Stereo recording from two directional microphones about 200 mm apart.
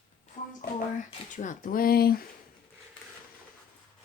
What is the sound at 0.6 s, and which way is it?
Hands, 45° left (ahead or behind).